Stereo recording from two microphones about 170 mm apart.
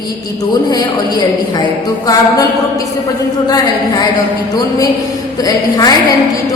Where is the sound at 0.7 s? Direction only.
25° left (ahead or behind).